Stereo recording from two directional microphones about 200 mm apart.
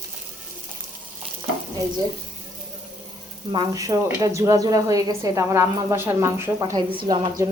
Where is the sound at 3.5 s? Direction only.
15° right (ahead or behind).